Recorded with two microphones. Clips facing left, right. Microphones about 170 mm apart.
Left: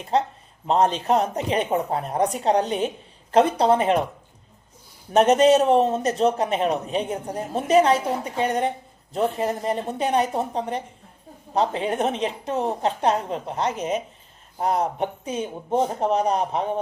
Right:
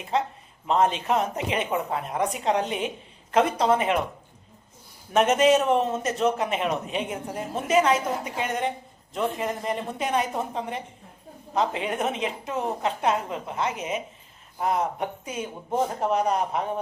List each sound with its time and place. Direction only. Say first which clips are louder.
0.1 s a man's voice: left 4 dB; 35° left (ahead or behind)
5.1 s a man's voice: left 4 dB; 35° left (ahead or behind)